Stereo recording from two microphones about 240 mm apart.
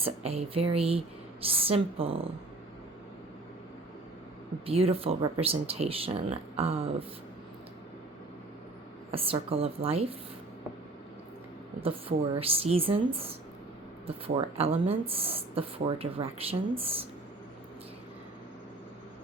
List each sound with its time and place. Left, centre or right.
0.0 s speech: right
4.6 s speech: right
9.1 s speech: right
11.8 s speech: right
14.3 s speech: right